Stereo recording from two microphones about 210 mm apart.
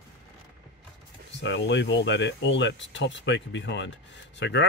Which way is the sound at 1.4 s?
60° left (ahead or behind).